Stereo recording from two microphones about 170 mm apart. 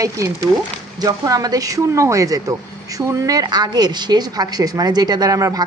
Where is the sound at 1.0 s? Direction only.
20° right (ahead or behind).